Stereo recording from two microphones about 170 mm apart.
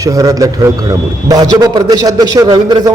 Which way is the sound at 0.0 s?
20° right (ahead or behind).